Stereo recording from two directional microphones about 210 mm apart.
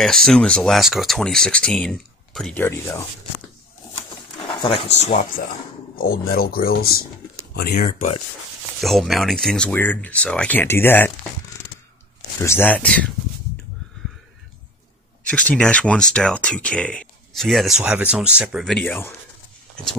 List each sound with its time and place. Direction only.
0.0 s speech: centre (ahead or behind)
4.5 s speech: 25° left (ahead or behind)
5.9 s speech: 45° left (ahead or behind)
8.8 s speech: centre (ahead or behind)
12.4 s speech: 10° left (ahead or behind)
15.2 s speech: 5° left (ahead or behind)